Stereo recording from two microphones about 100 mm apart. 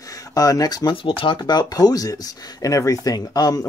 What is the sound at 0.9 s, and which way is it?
Speech, 60° left (ahead or behind).